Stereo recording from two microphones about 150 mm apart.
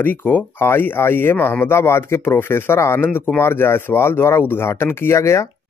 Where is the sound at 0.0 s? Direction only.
15° left (ahead or behind).